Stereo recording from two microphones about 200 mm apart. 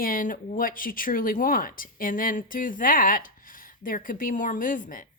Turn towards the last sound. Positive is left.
turn(degrees=40)  # may be behind; listen again after turning